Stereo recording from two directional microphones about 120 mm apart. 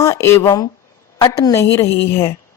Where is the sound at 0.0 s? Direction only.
25° left (ahead or behind).